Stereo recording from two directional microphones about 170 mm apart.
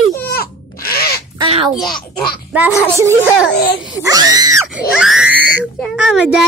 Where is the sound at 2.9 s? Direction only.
15° right (ahead or behind).